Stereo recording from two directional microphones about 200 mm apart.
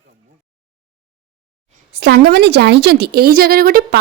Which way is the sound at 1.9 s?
55° right (ahead or behind).